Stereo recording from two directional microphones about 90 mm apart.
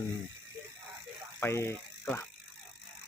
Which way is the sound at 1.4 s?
30° left (ahead or behind).